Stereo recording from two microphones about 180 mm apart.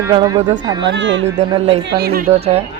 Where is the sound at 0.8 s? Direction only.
90° right.